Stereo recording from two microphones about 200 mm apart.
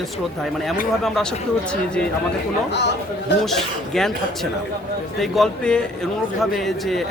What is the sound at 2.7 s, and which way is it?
Speech, 60° left (ahead or behind).